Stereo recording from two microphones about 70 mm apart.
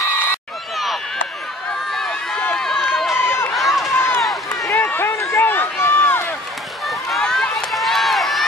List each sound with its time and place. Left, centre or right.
1.9 s run: centre
2.8 s run: centre
3.2 s run: left
3.5 s run: centre
3.9 s run: left
6.9 s run: centre